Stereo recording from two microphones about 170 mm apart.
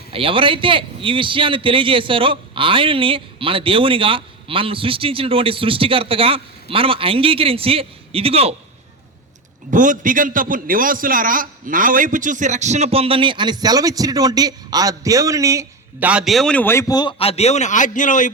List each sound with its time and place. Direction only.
0.1 s a man's voice: 30° right (ahead or behind)
9.7 s a man's voice: 50° right (ahead or behind); by 16.8 s 10° left (ahead or behind)
16.9 s speech: 25° left (ahead or behind); by 18.3 s 50° left (ahead or behind)